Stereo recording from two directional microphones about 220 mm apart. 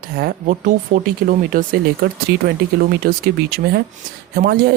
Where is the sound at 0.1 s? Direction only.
45° right (ahead or behind).